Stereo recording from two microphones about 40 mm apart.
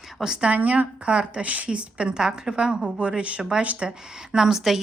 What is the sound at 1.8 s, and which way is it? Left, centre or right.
Speech, right.